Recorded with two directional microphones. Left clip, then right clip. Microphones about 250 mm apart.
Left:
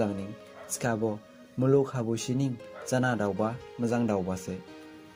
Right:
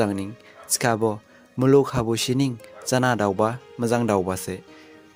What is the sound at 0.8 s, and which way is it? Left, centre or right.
Speech, right.